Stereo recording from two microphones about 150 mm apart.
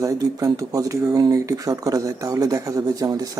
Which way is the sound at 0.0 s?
20° right (ahead or behind).